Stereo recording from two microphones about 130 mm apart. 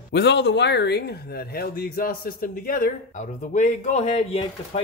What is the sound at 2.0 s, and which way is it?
Speech, 90° left.